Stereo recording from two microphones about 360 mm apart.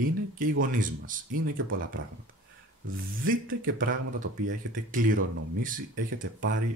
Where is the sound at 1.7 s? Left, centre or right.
Right.